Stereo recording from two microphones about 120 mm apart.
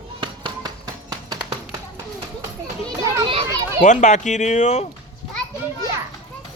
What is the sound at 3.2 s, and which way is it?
Children playing, 50° right (ahead or behind).